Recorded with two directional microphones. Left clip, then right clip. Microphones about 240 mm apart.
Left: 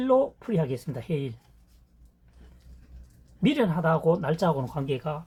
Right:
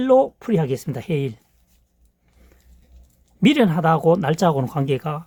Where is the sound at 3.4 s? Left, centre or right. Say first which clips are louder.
Right 8 dB; right.